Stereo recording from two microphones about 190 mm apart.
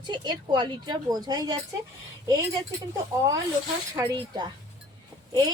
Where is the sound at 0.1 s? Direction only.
25° right (ahead or behind).